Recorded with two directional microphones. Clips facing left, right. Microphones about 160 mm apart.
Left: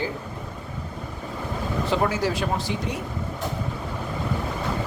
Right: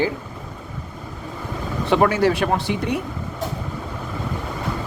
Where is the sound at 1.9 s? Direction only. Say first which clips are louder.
Right 8 dB; 65° right (ahead or behind).